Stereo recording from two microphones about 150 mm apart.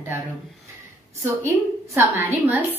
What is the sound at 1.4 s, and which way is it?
Speech, 20° right (ahead or behind).